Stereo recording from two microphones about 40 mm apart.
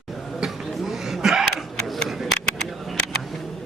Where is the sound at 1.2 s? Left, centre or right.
Centre.